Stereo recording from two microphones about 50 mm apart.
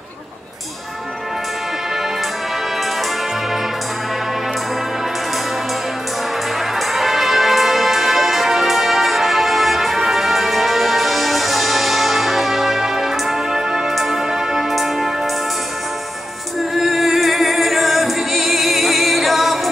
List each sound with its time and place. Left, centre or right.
6.9 s music: centre
16.7 s music: centre